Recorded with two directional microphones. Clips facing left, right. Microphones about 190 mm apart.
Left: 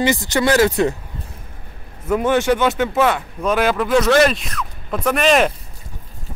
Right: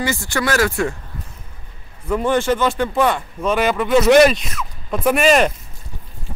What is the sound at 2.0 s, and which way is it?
Speech, 5° left (ahead or behind).